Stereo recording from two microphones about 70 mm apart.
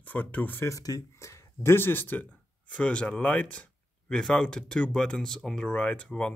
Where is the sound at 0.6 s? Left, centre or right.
Left.